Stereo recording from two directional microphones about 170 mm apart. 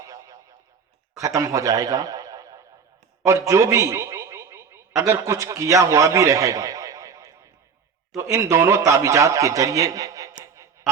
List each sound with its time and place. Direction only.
0.0 s radio: 20° right (ahead or behind)
1.1 s a man's voice: 20° right (ahead or behind)